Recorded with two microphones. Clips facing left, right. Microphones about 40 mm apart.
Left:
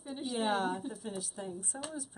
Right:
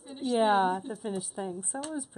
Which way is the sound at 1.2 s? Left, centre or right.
Centre.